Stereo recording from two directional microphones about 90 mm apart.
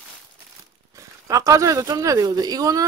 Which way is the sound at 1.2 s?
40° right (ahead or behind).